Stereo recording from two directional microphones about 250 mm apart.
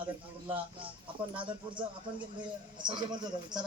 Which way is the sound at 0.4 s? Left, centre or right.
Right.